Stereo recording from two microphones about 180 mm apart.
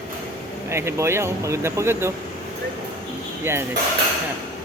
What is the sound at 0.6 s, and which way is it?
Speech, 15° right (ahead or behind).